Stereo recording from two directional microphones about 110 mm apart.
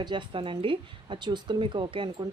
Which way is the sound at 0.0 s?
45° right (ahead or behind).